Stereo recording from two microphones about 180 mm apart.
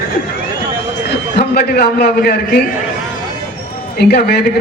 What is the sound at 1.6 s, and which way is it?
Speech, 55° left (ahead or behind).